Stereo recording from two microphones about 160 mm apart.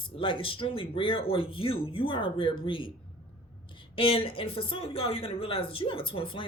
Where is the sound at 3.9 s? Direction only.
35° left (ahead or behind).